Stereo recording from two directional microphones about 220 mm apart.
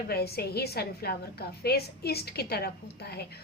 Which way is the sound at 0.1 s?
45° left (ahead or behind).